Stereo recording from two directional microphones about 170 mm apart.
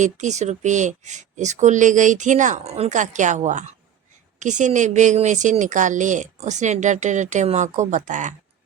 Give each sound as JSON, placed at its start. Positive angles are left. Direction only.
{"t": 0.0, "sound": "speech", "side_deg": -45}